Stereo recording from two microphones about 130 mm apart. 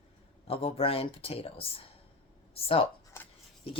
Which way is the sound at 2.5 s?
45° left (ahead or behind).